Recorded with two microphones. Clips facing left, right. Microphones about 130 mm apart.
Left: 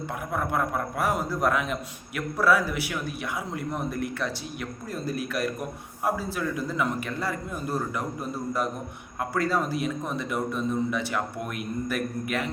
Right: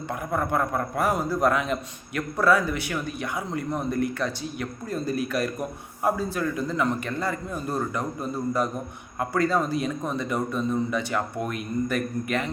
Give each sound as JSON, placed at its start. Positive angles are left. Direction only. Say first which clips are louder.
{"t": 0.3, "sound": "speech", "louder": "right 2 dB", "side_deg": 5}